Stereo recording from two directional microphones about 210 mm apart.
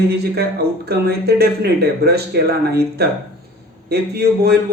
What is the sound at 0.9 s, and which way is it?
Speech, 50° right (ahead or behind).